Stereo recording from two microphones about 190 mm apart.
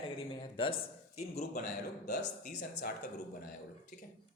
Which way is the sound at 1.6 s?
65° left (ahead or behind).